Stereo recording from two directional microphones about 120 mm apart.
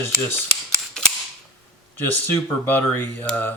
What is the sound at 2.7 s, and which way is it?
Speech, 15° left (ahead or behind).